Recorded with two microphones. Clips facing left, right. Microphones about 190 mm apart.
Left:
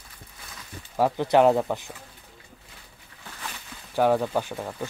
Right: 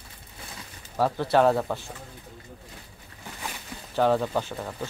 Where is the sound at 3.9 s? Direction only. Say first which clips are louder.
Left 1 dB; 10° left (ahead or behind).